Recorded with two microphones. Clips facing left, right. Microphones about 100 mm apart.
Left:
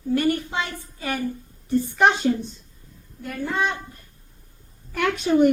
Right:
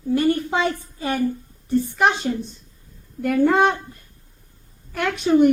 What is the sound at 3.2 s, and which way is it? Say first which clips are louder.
Speech: right 10 dB; 75° right (ahead or behind).